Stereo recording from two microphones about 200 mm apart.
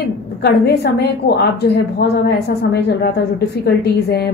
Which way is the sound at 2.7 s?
55° left (ahead or behind).